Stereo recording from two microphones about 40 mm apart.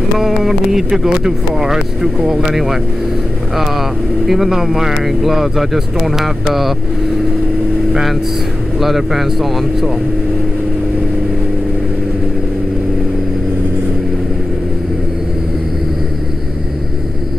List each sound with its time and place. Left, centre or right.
0.2 s speech: centre
2.5 s speech: centre
4.3 s speech: centre
7.9 s speech: centre